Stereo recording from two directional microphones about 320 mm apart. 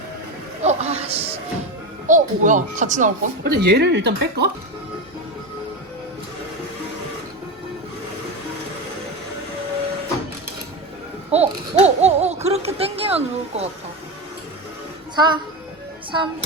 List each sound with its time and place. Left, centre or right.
0.6 s a sound: centre
2.0 s speech: right
11.3 s speech: centre
15.1 s a child's voice: centre